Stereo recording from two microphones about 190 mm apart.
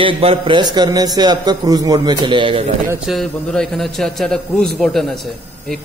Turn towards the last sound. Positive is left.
turn(degrees=0)  # may be behind; listen again after turning